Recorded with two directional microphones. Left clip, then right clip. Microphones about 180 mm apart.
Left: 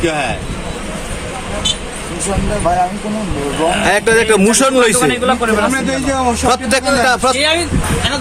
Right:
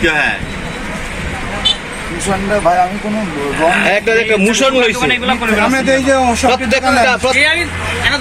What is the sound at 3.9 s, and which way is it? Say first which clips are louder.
Speech: left 1 dB; 25° left (ahead or behind).